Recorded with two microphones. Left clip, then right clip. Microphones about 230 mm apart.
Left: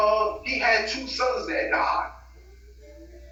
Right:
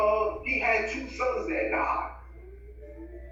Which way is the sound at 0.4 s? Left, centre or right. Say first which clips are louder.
Left 4 dB; centre.